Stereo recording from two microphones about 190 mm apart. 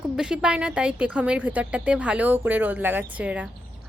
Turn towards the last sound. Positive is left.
turn(degrees=-5)  # may be behind; listen again after turning